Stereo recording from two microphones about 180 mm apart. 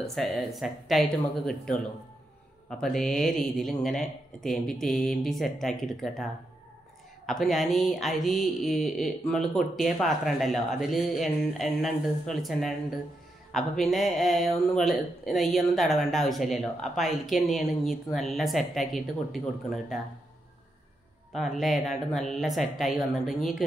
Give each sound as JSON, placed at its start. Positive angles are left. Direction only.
{"t": 0.0, "sound": "speech", "side_deg": 0}
{"t": 2.8, "sound": "speech", "side_deg": 0}
{"t": 7.2, "sound": "speech", "side_deg": 0}
{"t": 21.3, "sound": "speech", "side_deg": 0}